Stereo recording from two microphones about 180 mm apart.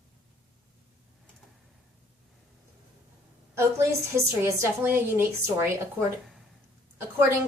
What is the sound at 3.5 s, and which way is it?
A woman's voice, 15° right (ahead or behind).